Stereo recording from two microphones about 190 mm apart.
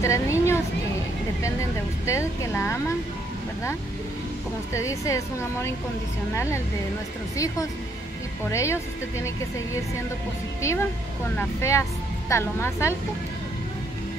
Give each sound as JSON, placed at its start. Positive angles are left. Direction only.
{"t": 0.0, "sound": "a sound", "side_deg": 15}
{"t": 1.4, "sound": "speech", "side_deg": 15}
{"t": 4.7, "sound": "speech", "side_deg": 15}
{"t": 10.6, "sound": "speech", "side_deg": 15}